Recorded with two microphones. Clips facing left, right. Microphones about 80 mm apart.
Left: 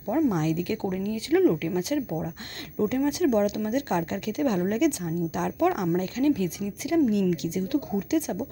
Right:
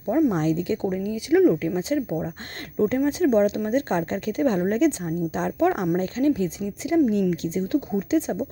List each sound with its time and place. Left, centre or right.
0.1 s speech: right